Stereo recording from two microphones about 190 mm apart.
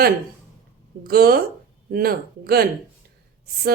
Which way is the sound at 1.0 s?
50° right (ahead or behind).